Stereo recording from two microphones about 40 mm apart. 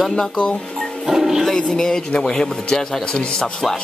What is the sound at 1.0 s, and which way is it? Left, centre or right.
Dog, centre.